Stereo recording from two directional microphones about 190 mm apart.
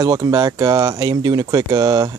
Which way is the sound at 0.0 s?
20° right (ahead or behind).